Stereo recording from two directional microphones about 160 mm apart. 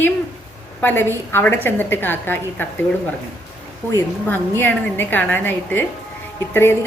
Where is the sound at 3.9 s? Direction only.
15° left (ahead or behind).